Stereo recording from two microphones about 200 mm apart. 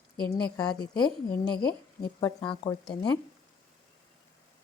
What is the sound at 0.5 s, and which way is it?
Speech, 20° left (ahead or behind).